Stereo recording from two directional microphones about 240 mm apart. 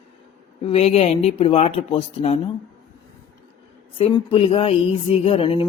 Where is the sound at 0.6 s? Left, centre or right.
Left.